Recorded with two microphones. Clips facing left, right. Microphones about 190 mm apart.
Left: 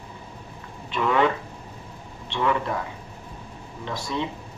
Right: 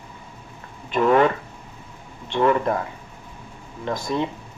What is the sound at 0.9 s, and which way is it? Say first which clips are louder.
Speech: right 5 dB; 45° right (ahead or behind).